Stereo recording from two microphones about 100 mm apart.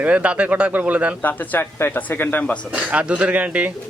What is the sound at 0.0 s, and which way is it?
A man's voice, 15° right (ahead or behind).